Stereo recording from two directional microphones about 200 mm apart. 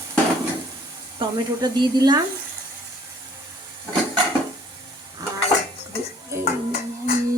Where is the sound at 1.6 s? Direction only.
20° right (ahead or behind).